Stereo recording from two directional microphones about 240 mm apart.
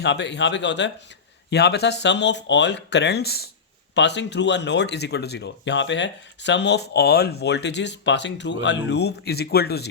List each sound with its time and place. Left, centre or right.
0.0 s speech: left